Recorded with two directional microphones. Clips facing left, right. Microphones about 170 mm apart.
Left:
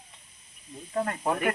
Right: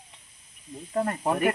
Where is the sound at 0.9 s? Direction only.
10° right (ahead or behind).